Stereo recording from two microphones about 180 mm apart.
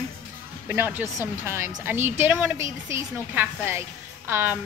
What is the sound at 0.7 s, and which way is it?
A woman's voice, 10° right (ahead or behind).